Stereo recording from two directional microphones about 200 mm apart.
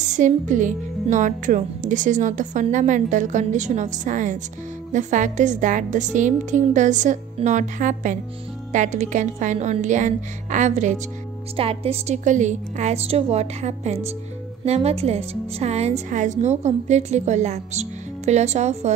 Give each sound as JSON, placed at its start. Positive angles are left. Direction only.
{"t": 0.0, "sound": "a woman's voice", "side_deg": -40}